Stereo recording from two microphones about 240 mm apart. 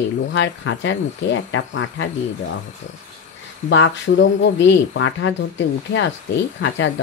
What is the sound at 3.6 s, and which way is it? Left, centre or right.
Speech, left.